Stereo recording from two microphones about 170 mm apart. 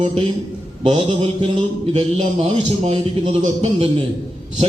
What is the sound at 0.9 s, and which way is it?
Speech, 35° right (ahead or behind).